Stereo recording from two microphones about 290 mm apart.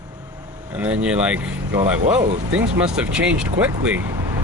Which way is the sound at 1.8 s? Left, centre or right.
Right.